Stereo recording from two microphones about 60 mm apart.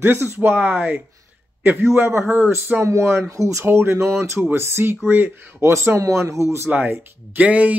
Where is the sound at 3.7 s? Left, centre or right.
Right.